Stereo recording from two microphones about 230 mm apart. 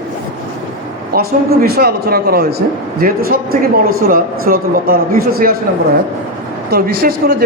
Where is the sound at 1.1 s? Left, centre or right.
Right.